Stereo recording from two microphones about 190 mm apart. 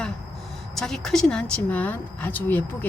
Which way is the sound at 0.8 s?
Centre (ahead or behind).